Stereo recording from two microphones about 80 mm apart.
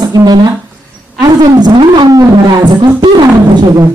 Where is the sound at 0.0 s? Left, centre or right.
Right.